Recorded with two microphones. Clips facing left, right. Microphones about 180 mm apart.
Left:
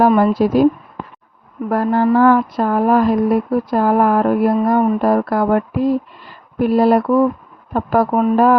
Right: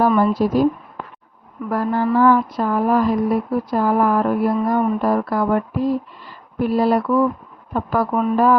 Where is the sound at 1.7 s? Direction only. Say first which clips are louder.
Left 4 dB; 55° left (ahead or behind).